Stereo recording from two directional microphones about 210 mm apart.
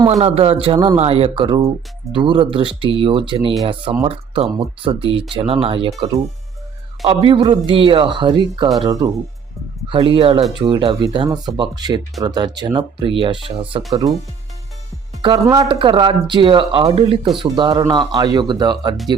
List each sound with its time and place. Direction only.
0.1 s speech: 30° right (ahead or behind)
7.0 s speech: 25° right (ahead or behind)
15.2 s speech: 20° right (ahead or behind)